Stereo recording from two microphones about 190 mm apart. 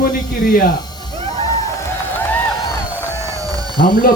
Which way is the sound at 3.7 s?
45° left (ahead or behind).